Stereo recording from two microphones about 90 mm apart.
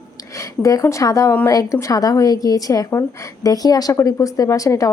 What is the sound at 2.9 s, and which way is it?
Speech, 30° left (ahead or behind).